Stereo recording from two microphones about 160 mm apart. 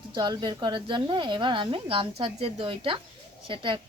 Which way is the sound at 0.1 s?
30° right (ahead or behind).